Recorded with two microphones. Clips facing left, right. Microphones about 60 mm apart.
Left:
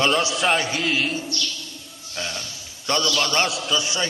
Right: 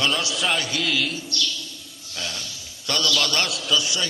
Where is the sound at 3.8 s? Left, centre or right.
Left.